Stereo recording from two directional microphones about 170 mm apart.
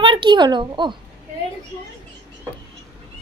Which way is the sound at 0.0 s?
30° right (ahead or behind).